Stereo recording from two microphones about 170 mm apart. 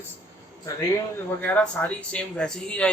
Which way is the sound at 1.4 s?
10° left (ahead or behind).